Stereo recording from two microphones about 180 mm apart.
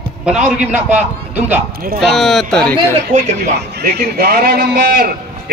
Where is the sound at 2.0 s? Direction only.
Centre (ahead or behind).